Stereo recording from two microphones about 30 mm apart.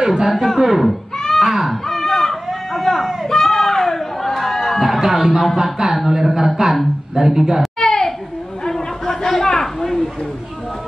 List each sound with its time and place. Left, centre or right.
0.0 s speech: centre
0.6 s a man's voice: centre
1.4 s wail: centre
1.9 s a sound: centre
5.1 s music: centre
5.6 s a man's voice: centre
7.8 s a sound: left